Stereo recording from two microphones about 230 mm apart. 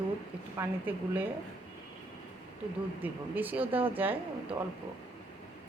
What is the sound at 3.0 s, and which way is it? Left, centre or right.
A woman's voice, centre.